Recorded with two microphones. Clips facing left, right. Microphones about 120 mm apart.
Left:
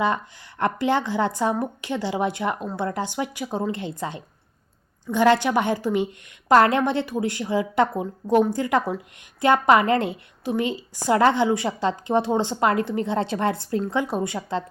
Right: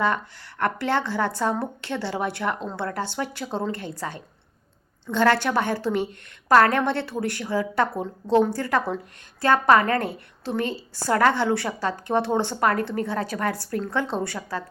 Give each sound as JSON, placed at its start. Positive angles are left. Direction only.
{"t": 0.6, "sound": "a woman's voice", "side_deg": 15}